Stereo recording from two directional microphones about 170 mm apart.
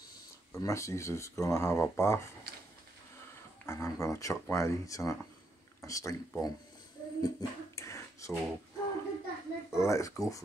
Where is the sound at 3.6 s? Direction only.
15° left (ahead or behind).